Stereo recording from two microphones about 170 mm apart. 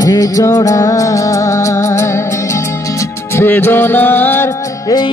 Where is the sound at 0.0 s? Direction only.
20° left (ahead or behind).